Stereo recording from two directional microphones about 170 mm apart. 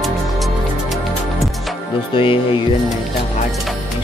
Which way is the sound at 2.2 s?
30° left (ahead or behind).